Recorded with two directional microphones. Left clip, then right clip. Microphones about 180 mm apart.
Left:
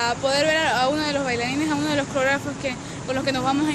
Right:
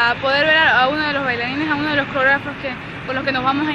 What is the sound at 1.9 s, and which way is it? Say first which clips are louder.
Speech: right 7 dB; 25° left (ahead or behind).